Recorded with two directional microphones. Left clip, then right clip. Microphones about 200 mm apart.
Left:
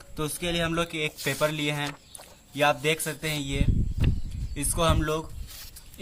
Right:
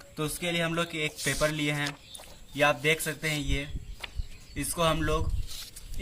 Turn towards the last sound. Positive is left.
turn(degrees=5)  # may be behind; listen again after turning